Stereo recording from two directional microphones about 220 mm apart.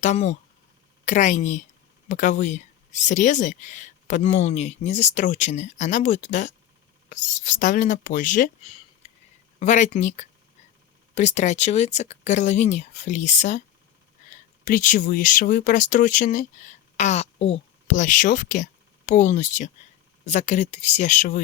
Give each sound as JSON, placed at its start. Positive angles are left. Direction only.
{"t": 0.0, "sound": "speech", "side_deg": 30}
{"t": 14.6, "sound": "speech", "side_deg": 35}